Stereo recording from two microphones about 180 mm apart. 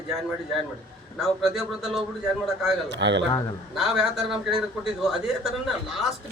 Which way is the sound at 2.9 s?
80° right.